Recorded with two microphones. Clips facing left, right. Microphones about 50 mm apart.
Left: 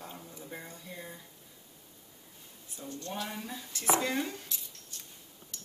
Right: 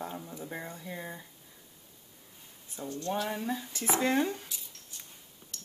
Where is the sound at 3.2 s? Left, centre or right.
Centre.